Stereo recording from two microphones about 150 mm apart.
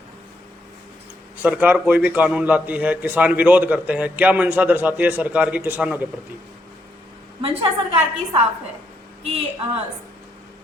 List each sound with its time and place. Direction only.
1.4 s a man's voice: 10° right (ahead or behind)
7.4 s a woman's voice: 35° right (ahead or behind)